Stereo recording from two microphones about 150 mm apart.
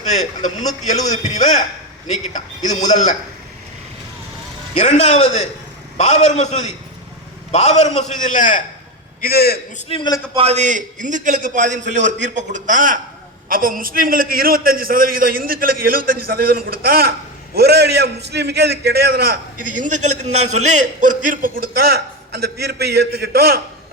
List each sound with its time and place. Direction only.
0.0 s a man's voice: 50° left (ahead or behind)
4.8 s a man's voice: 50° left (ahead or behind)
9.2 s a man's voice: 90° left
9.9 s a man's voice: 30° left (ahead or behind)
10.3 s a man's voice: 45° right (ahead or behind); by 23.6 s 90° right